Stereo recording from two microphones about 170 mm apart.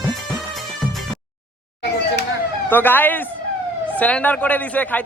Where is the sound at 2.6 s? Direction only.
10° left (ahead or behind).